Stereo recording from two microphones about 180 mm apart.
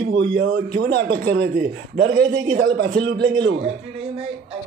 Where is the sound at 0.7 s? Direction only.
65° right (ahead or behind).